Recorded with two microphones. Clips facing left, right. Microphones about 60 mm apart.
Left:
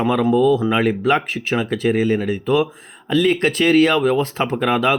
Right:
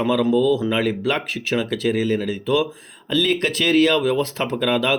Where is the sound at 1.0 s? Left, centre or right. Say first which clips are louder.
Left 5 dB; left.